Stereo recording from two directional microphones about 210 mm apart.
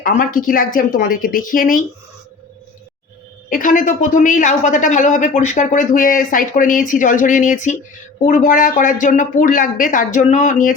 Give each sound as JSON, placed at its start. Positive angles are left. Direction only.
{"t": 0.0, "sound": "speech", "side_deg": 40}
{"t": 3.5, "sound": "speech", "side_deg": 40}